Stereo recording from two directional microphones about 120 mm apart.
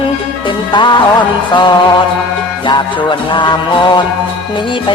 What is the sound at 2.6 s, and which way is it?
Music, 40° left (ahead or behind).